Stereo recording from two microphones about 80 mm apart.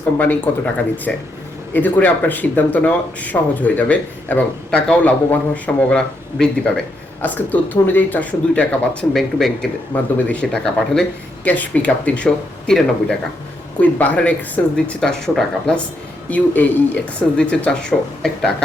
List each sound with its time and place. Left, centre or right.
0.2 s speech: left
1.1 s speech: centre
1.7 s speech: left
7.2 s speech: left
9.1 s speech: centre
9.9 s speech: centre
13.8 s speech: centre
16.3 s speech: centre